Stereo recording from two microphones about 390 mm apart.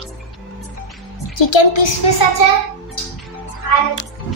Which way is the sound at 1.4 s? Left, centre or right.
Left.